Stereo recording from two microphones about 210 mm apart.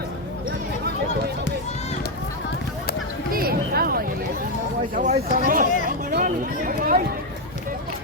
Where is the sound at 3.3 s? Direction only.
45° right (ahead or behind).